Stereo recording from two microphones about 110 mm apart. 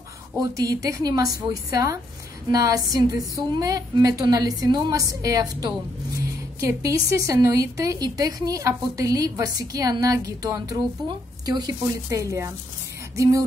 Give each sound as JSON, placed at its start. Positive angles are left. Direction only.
{"t": 0.4, "sound": "a woman's voice", "side_deg": -30}